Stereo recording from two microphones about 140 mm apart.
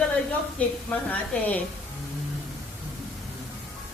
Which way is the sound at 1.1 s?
10° left (ahead or behind).